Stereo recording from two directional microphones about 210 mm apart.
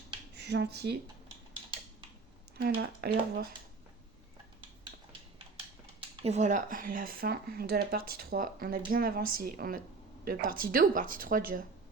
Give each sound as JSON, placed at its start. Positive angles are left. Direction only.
{"t": 0.3, "sound": "speech", "side_deg": -55}
{"t": 2.6, "sound": "speech", "side_deg": -50}
{"t": 6.0, "sound": "speech", "side_deg": -30}